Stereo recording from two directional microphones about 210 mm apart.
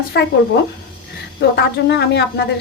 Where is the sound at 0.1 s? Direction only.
50° left (ahead or behind).